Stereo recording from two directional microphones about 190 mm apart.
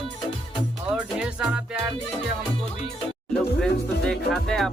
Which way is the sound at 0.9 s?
5° right (ahead or behind).